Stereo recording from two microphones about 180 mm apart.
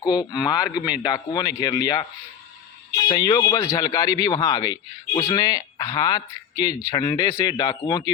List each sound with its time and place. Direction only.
0.0 s speech: 20° left (ahead or behind)
0.7 s a man's voice: 5° right (ahead or behind)
1.0 s speech: 25° left (ahead or behind)
3.1 s speech: 25° left (ahead or behind)